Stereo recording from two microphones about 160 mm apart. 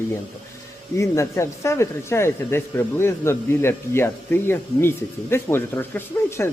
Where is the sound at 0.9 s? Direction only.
20° left (ahead or behind).